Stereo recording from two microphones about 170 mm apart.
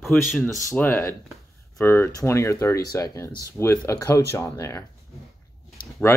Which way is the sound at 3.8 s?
20° left (ahead or behind).